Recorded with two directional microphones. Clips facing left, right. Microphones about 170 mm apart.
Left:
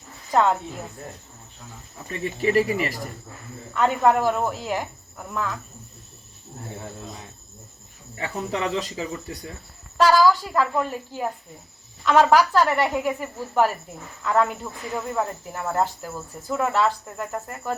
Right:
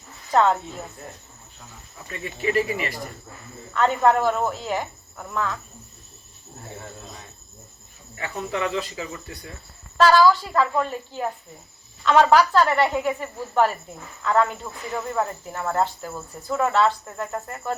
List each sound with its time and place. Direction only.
0.3 s speech: 5° left (ahead or behind)
2.0 s speech: 35° left (ahead or behind)
3.8 s speech: 10° left (ahead or behind)
8.2 s speech: 30° left (ahead or behind)
10.0 s speech: 10° left (ahead or behind)